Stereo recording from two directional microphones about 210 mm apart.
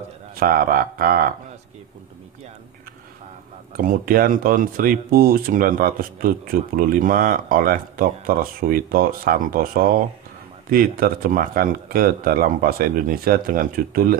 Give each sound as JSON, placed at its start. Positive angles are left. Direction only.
{"t": 0.4, "sound": "speech", "side_deg": -45}
{"t": 3.7, "sound": "speech", "side_deg": -45}